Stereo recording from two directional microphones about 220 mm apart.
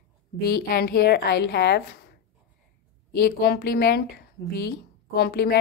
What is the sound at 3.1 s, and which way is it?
A woman's voice, 45° left (ahead or behind).